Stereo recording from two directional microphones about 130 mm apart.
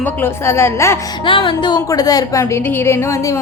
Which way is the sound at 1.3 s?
40° left (ahead or behind).